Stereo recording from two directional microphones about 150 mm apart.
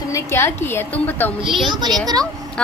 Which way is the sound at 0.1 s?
20° left (ahead or behind).